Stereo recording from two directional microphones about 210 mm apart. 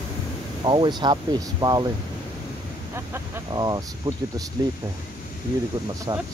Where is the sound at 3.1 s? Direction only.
20° right (ahead or behind).